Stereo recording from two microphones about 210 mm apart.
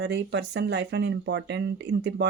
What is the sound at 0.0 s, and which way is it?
Speech, 55° right (ahead or behind).